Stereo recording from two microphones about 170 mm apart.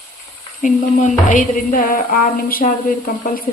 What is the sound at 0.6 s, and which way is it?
Speech, 50° left (ahead or behind).